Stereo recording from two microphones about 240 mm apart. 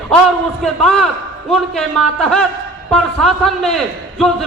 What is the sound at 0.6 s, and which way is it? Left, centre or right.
A man's voice, centre.